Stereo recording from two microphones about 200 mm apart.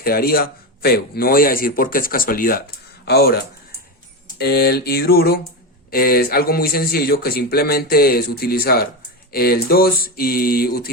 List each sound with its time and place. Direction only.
0.0 s a man's voice: 50° left (ahead or behind)
4.4 s a man's voice: 55° left (ahead or behind)